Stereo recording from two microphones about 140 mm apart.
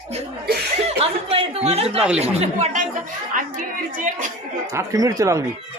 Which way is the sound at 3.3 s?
70° right (ahead or behind).